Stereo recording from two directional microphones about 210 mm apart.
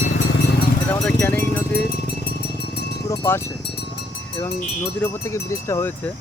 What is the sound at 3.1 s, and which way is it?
Speech, 15° left (ahead or behind).